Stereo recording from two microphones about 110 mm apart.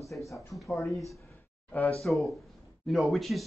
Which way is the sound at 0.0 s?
Centre (ahead or behind).